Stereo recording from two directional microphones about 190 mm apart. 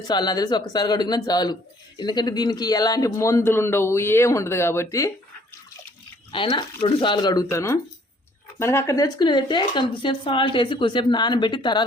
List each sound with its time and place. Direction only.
0.1 s a man's voice: 20° left (ahead or behind)
6.3 s speech: 25° left (ahead or behind)